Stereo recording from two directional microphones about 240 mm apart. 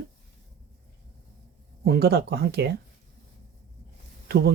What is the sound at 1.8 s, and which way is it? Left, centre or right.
Speech, right.